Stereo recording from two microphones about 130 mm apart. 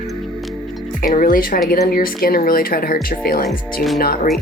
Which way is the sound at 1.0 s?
90° left.